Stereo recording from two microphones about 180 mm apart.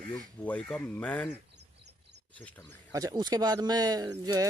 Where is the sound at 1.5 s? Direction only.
70° right (ahead or behind).